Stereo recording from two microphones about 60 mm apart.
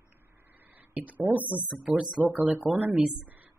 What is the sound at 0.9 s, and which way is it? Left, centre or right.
Speech, right.